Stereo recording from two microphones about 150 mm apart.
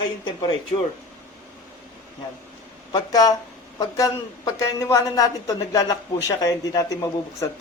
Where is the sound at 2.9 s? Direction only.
25° left (ahead or behind).